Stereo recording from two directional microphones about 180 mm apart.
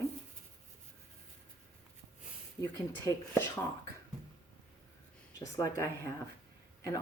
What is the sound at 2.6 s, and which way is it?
Speech, 10° left (ahead or behind).